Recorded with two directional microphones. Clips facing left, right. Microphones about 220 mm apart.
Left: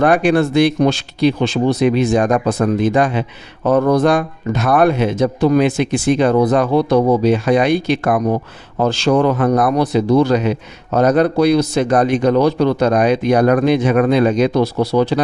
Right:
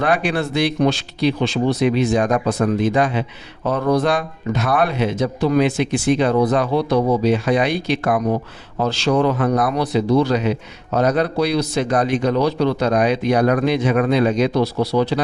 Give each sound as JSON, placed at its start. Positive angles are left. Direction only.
{"t": 0.0, "sound": "speech", "side_deg": 50}